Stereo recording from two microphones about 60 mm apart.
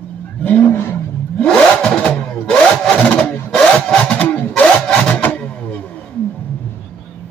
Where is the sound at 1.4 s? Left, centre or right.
Centre.